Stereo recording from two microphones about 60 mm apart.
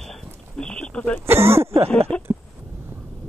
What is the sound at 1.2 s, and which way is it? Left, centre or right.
Speech, right.